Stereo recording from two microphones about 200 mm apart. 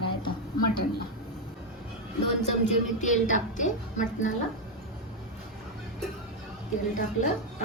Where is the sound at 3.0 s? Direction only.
40° left (ahead or behind).